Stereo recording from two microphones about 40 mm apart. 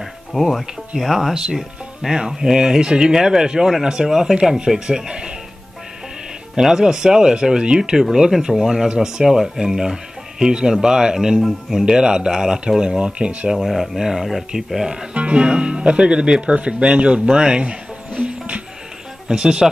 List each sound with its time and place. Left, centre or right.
0.3 s speech: centre
1.3 s speech: centre
6.8 s speech: centre
13.7 s speech: centre
15.1 s speech: right
19.2 s speech: right